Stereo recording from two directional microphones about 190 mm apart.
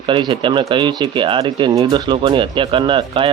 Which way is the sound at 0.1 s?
25° right (ahead or behind).